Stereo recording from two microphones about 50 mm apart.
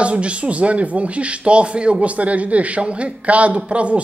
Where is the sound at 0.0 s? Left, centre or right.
Right.